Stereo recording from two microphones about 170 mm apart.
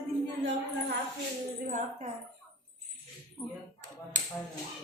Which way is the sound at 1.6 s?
50° right (ahead or behind).